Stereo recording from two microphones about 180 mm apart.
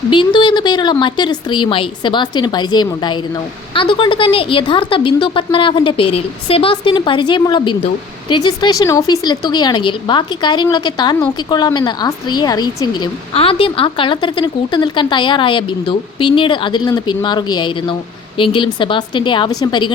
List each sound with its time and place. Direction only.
0.1 s speech: 25° left (ahead or behind)